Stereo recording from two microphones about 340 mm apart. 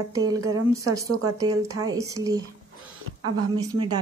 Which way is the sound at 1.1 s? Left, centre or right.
Right.